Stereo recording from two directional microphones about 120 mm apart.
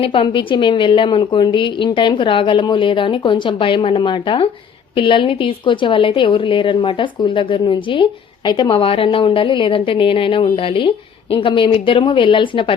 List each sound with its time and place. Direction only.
0.0 s a woman's voice: 45° left (ahead or behind)